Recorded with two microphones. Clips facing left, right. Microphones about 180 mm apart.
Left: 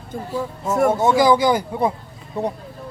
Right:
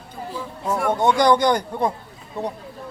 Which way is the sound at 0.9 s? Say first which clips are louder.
Even; 5° left (ahead or behind).